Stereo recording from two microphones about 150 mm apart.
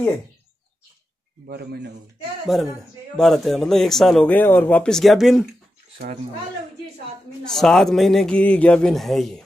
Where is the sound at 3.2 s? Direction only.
Centre (ahead or behind).